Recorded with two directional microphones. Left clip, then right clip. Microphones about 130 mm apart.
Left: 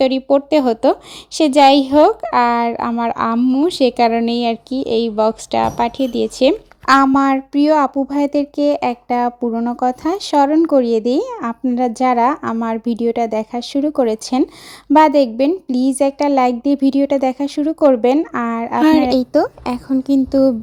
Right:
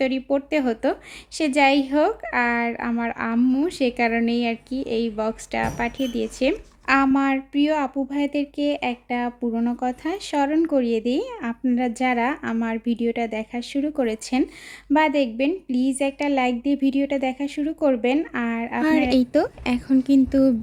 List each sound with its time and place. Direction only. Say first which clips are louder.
0.0 s a woman's voice: left 9 dB; 45° left (ahead or behind)
3.3 s a woman's voice: left 6 dB; 35° left (ahead or behind)
3.7 s a woman's voice: left 8 dB; 50° left (ahead or behind)
9.5 s a woman's voice: left 7 dB; 30° left (ahead or behind)
19.1 s a woman's voice: left 5 dB; 20° left (ahead or behind)